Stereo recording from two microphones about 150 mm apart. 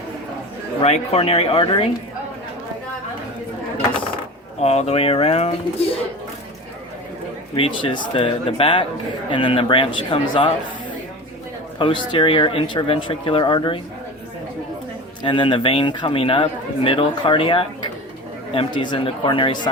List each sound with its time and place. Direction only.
0.8 s a man's voice: 45° left (ahead or behind)
4.6 s a man's voice: 45° left (ahead or behind)
7.5 s a man's voice: 35° left (ahead or behind)
11.8 s a man's voice: 35° left (ahead or behind)
15.2 s a man's voice: 30° left (ahead or behind)